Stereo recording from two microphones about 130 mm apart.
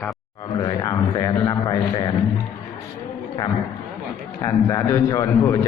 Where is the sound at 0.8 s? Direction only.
25° left (ahead or behind).